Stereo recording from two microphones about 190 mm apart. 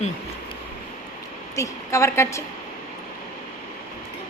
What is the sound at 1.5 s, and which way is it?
Speech, 15° left (ahead or behind).